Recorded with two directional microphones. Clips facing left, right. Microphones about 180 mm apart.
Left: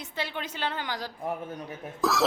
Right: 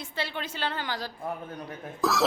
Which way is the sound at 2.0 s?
Centre (ahead or behind).